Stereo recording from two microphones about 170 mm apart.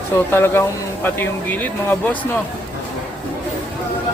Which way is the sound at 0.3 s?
15° left (ahead or behind).